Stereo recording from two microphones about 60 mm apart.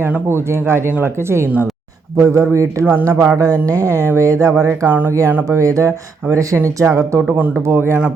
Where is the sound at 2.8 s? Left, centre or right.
Right.